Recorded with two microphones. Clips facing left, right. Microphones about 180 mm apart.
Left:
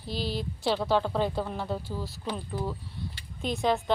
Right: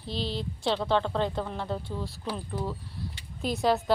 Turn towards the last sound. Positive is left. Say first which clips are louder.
# right 1 dB
turn(degrees=-5)  # may be behind; listen again after turning